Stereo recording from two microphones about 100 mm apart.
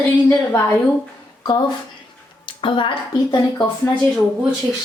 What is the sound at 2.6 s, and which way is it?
Speech, 55° left (ahead or behind).